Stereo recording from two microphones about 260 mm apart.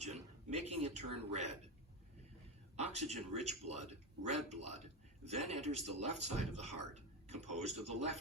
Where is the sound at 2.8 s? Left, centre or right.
Right.